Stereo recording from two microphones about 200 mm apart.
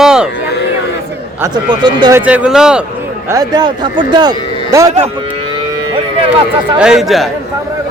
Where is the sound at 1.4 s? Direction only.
20° right (ahead or behind).